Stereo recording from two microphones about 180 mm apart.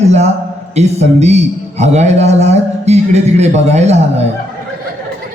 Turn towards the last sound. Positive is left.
turn(degrees=-40)  # may be behind; listen again after turning